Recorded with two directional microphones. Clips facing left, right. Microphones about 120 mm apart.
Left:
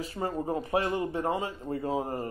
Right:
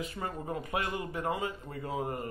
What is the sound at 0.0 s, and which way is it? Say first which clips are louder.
Speech: left 5 dB; 30° left (ahead or behind).